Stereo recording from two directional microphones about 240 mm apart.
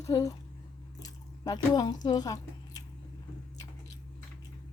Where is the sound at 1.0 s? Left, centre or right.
Centre.